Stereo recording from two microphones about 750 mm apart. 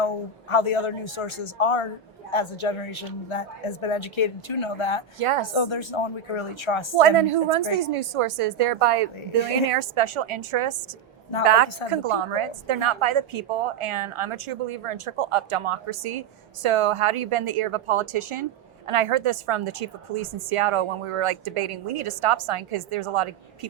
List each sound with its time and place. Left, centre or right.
0.5 s a woman's voice: left
5.2 s a woman's voice: right
5.5 s a woman's voice: left
7.3 s a woman's voice: right